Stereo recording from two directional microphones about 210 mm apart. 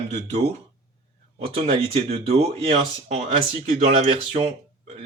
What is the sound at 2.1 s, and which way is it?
Speech, 30° right (ahead or behind).